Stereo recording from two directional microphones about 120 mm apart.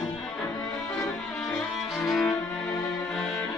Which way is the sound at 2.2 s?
25° left (ahead or behind).